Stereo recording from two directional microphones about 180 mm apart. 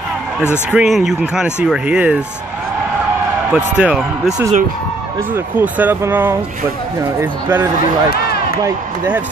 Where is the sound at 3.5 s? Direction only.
5° right (ahead or behind).